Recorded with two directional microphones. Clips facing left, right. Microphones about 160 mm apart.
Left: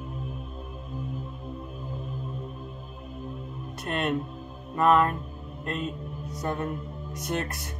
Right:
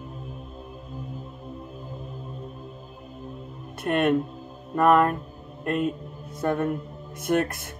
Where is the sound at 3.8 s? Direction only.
55° right (ahead or behind).